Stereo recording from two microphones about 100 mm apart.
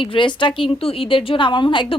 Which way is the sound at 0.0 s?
55° left (ahead or behind).